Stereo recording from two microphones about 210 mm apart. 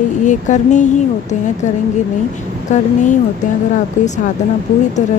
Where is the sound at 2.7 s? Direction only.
35° left (ahead or behind).